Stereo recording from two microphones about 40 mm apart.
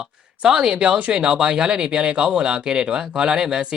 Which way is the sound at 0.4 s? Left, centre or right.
Centre.